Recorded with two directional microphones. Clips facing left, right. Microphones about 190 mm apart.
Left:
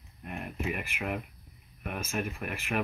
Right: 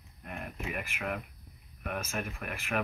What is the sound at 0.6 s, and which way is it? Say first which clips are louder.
Speech: left 2 dB; 15° left (ahead or behind).